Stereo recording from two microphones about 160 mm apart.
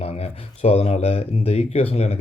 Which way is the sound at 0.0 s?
40° left (ahead or behind).